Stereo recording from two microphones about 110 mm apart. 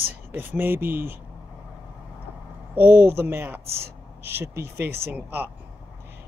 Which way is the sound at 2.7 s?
15° right (ahead or behind).